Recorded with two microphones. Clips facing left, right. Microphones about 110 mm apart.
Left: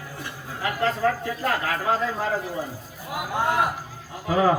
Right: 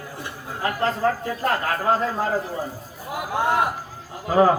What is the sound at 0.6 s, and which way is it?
A man's voice, 35° right (ahead or behind).